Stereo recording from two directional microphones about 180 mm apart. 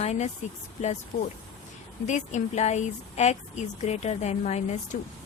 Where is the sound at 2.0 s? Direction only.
40° left (ahead or behind).